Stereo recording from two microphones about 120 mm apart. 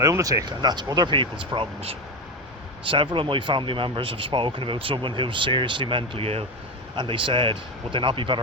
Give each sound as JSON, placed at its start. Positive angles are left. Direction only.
{"t": 0.0, "sound": "speech", "side_deg": -30}
{"t": 6.9, "sound": "speech", "side_deg": -40}